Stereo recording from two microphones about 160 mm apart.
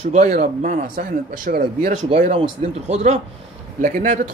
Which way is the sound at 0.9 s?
70° right (ahead or behind).